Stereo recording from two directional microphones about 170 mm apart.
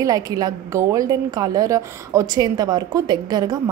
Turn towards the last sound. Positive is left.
turn(degrees=-25)  # may be behind; listen again after turning